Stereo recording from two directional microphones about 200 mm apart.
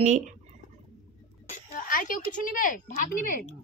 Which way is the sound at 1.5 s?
45° left (ahead or behind).